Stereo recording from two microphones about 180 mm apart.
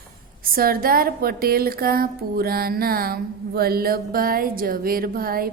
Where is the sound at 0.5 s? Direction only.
55° right (ahead or behind).